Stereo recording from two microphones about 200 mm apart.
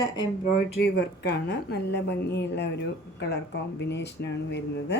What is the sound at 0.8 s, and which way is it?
A woman's voice, 55° left (ahead or behind).